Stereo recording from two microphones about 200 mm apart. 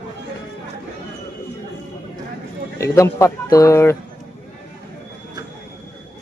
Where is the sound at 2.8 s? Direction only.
15° left (ahead or behind).